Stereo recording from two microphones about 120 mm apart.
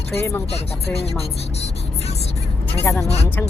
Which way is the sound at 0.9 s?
60° left (ahead or behind).